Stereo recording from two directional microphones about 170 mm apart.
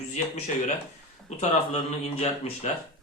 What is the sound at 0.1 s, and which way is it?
Speech, 45° left (ahead or behind).